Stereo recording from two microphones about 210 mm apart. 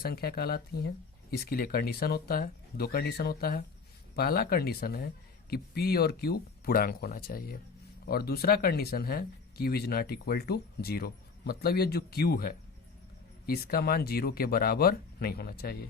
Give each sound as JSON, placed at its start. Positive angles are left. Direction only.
{"t": 0.0, "sound": "speech", "side_deg": 45}